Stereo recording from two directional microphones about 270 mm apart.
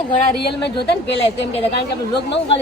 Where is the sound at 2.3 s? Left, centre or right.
Left.